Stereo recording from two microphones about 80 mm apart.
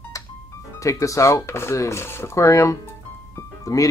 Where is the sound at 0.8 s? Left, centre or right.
Left.